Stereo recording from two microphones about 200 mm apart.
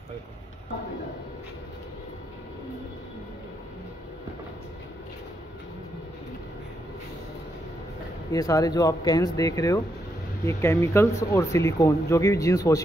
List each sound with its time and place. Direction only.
8.3 s speech: 15° left (ahead or behind)